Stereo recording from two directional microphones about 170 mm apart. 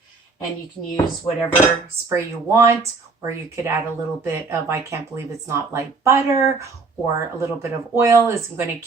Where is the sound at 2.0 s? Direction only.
15° right (ahead or behind).